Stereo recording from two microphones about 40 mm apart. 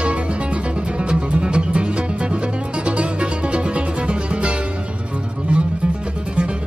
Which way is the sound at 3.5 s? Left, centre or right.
Right.